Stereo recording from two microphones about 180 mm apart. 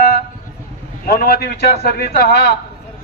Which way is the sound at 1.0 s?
60° left (ahead or behind).